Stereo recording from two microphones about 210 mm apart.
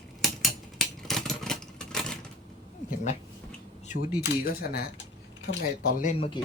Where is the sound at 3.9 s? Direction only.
45° left (ahead or behind).